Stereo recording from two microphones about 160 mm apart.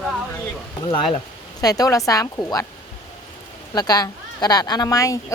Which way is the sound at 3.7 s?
25° left (ahead or behind).